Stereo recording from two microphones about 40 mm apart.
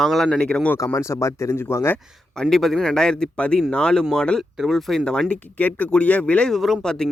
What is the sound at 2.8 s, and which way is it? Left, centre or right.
Speech, left.